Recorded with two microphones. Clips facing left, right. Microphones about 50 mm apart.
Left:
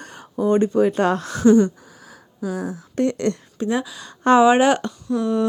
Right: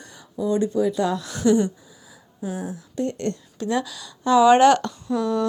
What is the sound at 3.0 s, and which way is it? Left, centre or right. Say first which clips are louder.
Speech: left 5 dB; left.